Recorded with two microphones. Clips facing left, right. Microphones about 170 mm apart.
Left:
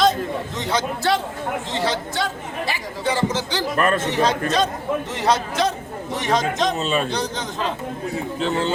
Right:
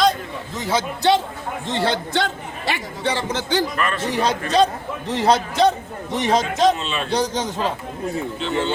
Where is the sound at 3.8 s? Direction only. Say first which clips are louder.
Left 4 dB; 45° left (ahead or behind).